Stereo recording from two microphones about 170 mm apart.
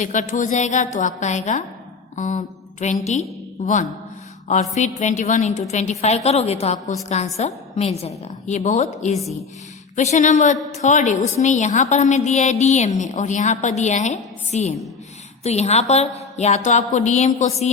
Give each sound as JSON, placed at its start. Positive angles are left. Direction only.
{"t": 0.0, "sound": "a woman's voice", "side_deg": 50}
{"t": 4.7, "sound": "a woman's voice", "side_deg": 45}